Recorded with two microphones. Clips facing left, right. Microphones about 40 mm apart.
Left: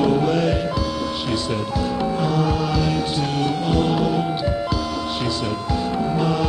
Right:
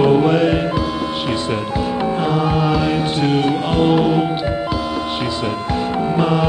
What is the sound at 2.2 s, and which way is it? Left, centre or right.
Music, right.